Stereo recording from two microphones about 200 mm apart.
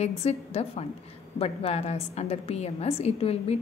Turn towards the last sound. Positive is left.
turn(degrees=30)  # may be behind; listen again after turning